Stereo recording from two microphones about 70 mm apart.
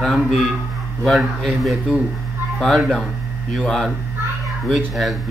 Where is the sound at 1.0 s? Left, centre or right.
Centre.